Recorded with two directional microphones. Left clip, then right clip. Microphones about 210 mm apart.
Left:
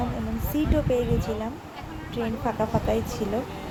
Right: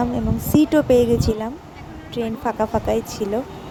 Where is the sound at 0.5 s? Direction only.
40° right (ahead or behind).